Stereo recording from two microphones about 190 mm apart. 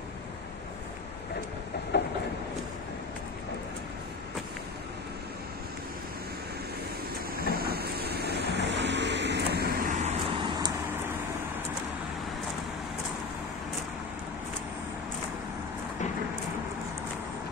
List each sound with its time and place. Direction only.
1.9 s train: 60° left (ahead or behind)
7.5 s vehicle: 55° right (ahead or behind)
10.3 s vehicle: 25° right (ahead or behind)